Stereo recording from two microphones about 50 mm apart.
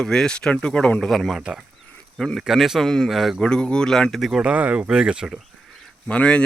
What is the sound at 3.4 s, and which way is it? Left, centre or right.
Speech, centre.